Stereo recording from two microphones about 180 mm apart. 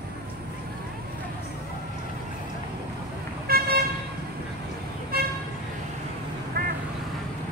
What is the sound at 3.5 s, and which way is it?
Vehicle, 55° right (ahead or behind).